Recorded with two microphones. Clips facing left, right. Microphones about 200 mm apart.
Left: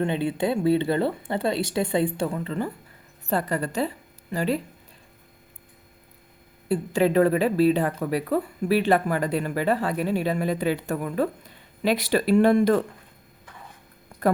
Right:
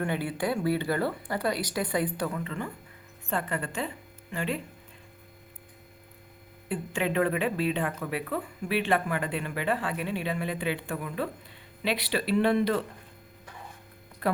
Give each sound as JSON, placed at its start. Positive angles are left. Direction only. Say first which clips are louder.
{"t": 0.0, "sound": "a woman's voice", "louder": "left 5 dB", "side_deg": 25}
{"t": 6.7, "sound": "speech", "louder": "left 8 dB", "side_deg": 40}